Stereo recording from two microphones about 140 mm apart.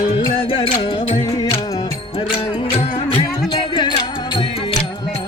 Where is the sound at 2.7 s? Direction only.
45° left (ahead or behind).